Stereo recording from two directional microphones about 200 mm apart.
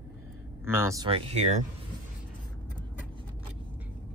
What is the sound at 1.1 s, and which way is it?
Speech, 30° right (ahead or behind).